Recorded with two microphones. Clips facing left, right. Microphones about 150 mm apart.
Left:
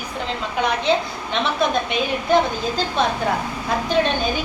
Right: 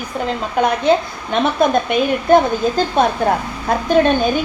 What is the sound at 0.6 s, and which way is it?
A woman's voice, 50° right (ahead or behind).